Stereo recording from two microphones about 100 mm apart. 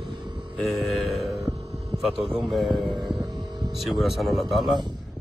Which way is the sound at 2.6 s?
50° right (ahead or behind).